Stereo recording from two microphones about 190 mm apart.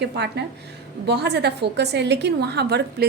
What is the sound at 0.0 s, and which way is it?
A woman's voice, 60° right (ahead or behind).